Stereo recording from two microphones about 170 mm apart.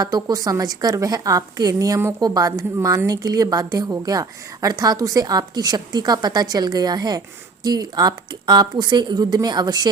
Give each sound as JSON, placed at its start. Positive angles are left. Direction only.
{"t": 0.0, "sound": "a woman's voice", "side_deg": -20}